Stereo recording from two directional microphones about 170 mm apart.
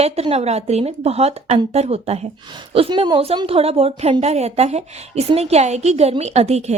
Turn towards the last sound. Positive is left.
turn(degrees=-40)  # may be behind; listen again after turning